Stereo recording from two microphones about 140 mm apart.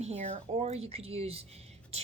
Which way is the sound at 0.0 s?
50° right (ahead or behind).